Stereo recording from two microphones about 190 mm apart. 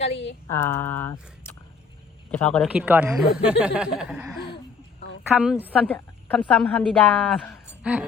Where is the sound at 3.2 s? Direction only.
55° left (ahead or behind).